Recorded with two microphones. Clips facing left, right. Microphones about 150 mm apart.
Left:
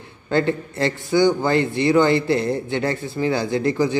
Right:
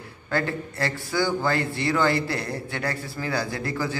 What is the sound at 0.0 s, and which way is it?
A man's voice, 20° left (ahead or behind).